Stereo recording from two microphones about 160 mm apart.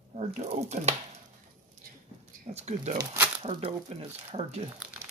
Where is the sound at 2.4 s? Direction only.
45° right (ahead or behind).